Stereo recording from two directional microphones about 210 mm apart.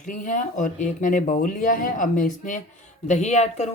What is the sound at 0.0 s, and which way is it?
Speech, 40° left (ahead or behind).